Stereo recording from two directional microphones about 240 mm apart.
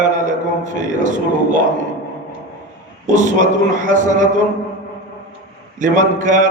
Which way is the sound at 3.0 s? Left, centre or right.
Right.